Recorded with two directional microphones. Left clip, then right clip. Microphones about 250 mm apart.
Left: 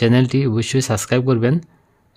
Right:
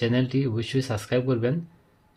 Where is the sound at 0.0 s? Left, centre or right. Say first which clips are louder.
Left 8 dB; left.